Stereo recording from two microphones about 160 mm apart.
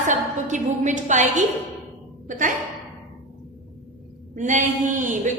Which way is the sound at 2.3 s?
55° right (ahead or behind).